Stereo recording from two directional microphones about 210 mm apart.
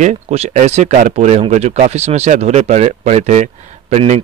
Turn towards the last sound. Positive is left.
turn(degrees=-30)  # may be behind; listen again after turning